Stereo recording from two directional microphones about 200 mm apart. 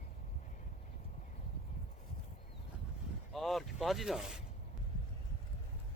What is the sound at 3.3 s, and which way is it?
Speech, centre (ahead or behind).